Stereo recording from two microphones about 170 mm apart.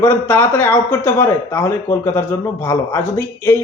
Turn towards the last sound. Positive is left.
turn(degrees=15)  # may be behind; listen again after turning